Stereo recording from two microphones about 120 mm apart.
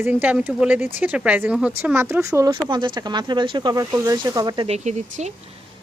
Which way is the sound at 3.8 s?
30° right (ahead or behind).